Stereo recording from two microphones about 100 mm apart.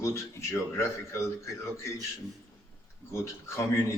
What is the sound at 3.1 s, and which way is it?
Speech, 30° left (ahead or behind).